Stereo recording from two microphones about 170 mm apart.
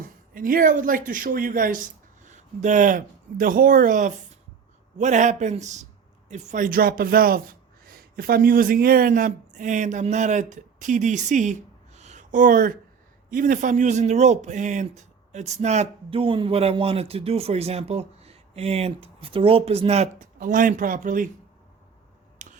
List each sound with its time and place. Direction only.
0.0 s speech: 55° right (ahead or behind)
11.9 s a sound: 45° right (ahead or behind)
13.3 s speech: 50° right (ahead or behind)
22.4 s scissors: 50° right (ahead or behind)